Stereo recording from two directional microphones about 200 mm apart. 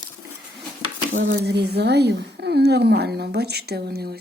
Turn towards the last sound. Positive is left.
turn(degrees=-50)  # may be behind; listen again after turning